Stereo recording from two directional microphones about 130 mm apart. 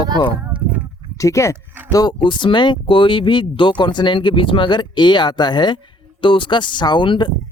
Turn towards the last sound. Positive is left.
turn(degrees=35)  # may be behind; listen again after turning